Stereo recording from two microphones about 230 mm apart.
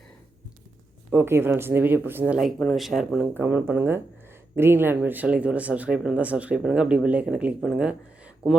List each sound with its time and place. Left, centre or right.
1.1 s speech: centre